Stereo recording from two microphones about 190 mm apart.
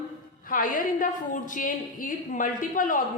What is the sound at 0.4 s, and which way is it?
A woman's voice, 45° left (ahead or behind).